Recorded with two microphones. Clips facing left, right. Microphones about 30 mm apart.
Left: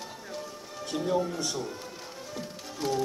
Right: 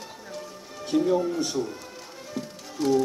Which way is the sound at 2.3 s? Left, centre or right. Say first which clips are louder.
Right 5 dB; centre.